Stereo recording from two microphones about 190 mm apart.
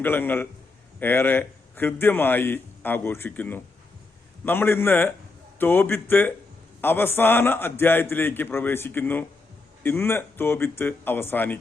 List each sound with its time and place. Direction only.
0.0 s a man's voice: 10° left (ahead or behind)